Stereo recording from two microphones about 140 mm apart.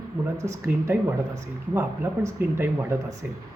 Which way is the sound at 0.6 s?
10° right (ahead or behind).